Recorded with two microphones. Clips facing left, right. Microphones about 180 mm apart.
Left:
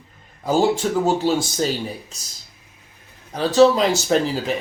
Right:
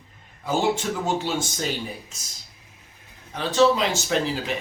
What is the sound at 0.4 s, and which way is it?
Speech, 35° left (ahead or behind).